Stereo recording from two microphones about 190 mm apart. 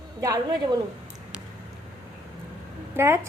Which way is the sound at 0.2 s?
15° right (ahead or behind).